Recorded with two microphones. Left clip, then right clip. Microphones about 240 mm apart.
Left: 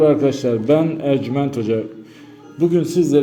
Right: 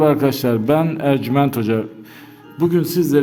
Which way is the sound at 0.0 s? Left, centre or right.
Right.